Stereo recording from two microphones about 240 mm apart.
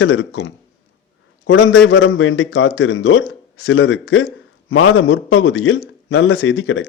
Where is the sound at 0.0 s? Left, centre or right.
Left.